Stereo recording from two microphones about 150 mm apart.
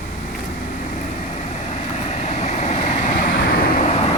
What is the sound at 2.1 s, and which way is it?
Vehicle, 50° left (ahead or behind).